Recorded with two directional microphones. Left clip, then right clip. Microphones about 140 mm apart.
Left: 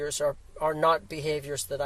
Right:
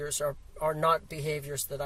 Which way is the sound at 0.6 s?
45° left (ahead or behind).